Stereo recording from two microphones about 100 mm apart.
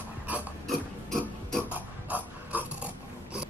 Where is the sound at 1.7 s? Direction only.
15° right (ahead or behind).